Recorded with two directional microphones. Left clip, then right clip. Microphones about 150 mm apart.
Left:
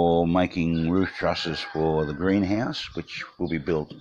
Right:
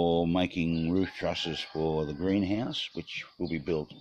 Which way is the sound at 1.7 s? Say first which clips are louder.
Left 7 dB; 5° right (ahead or behind).